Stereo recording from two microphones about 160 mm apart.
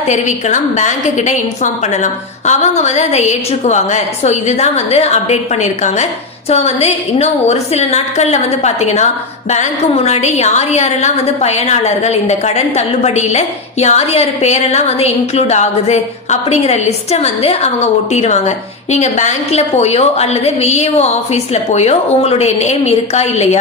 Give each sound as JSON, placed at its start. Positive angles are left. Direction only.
{"t": 0.0, "sound": "a woman's voice", "side_deg": 50}